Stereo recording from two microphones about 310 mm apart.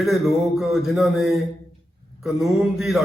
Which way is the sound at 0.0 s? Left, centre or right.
Centre.